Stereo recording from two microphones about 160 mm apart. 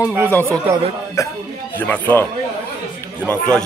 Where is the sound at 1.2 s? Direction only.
20° left (ahead or behind).